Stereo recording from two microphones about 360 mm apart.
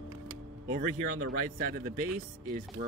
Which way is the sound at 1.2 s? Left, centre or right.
Right.